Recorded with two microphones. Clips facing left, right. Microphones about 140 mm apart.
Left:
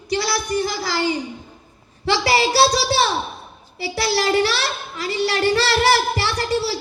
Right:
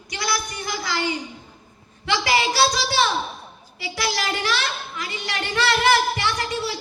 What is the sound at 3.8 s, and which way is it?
A child's voice, 30° left (ahead or behind).